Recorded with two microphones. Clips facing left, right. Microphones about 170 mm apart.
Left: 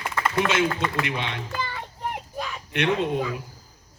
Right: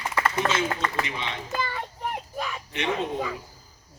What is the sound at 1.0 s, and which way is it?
Speech, 60° left (ahead or behind).